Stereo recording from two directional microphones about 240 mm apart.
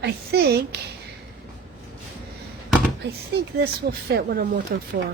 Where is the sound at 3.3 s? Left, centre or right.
Right.